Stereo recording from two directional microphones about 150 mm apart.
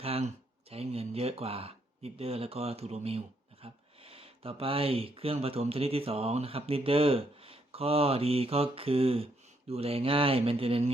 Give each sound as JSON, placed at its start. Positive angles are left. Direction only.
{"t": 0.0, "sound": "speech", "side_deg": -40}